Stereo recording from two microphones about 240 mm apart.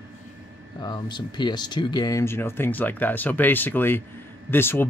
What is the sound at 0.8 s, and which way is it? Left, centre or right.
Speech, centre.